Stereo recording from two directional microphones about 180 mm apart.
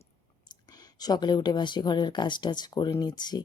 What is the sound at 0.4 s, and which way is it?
Speech, 20° left (ahead or behind).